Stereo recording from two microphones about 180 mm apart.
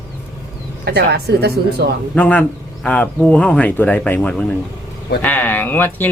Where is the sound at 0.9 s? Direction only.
65° right (ahead or behind).